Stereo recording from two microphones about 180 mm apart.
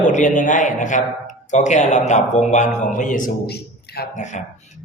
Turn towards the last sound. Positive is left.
turn(degrees=40)  # may be behind; listen again after turning